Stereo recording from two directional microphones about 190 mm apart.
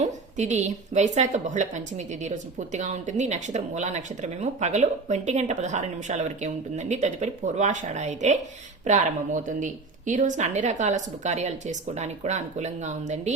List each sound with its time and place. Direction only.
0.0 s a woman's voice: 40° right (ahead or behind)